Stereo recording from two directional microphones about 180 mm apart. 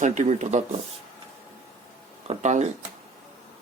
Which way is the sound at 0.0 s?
40° right (ahead or behind).